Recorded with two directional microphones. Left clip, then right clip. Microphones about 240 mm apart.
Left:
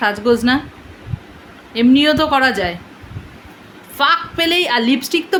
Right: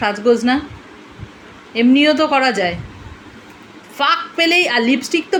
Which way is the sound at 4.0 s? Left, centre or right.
Centre.